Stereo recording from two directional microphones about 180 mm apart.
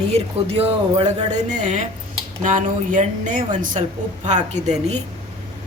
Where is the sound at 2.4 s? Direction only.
45° right (ahead or behind).